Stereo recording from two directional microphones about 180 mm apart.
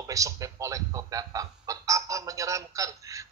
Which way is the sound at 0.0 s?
20° right (ahead or behind).